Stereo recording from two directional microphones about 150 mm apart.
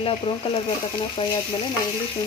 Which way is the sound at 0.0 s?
40° left (ahead or behind).